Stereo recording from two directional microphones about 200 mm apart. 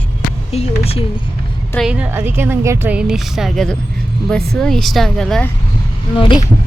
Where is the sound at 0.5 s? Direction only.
30° left (ahead or behind).